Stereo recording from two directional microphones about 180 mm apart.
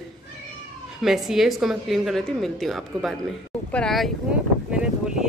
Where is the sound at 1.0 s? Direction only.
Centre (ahead or behind).